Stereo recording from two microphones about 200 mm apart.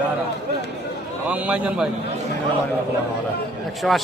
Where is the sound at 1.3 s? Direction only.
5° right (ahead or behind).